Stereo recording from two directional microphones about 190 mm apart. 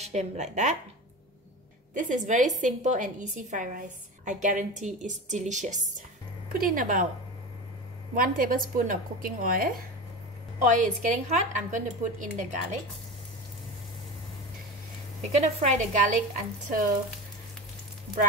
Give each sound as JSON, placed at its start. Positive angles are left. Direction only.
{"t": 0.0, "sound": "a woman's voice", "side_deg": -35}
{"t": 2.0, "sound": "a woman's voice", "side_deg": -40}
{"t": 8.1, "sound": "a woman's voice", "side_deg": -50}
{"t": 15.3, "sound": "a woman's voice", "side_deg": -40}